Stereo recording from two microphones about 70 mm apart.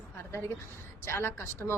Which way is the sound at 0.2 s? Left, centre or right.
Left.